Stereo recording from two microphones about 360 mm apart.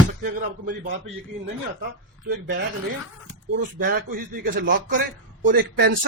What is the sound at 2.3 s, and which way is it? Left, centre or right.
Speech, right.